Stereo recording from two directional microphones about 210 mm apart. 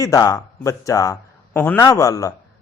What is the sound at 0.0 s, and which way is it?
Speech, 15° left (ahead or behind).